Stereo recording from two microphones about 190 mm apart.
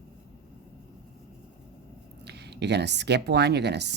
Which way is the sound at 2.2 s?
60° right (ahead or behind).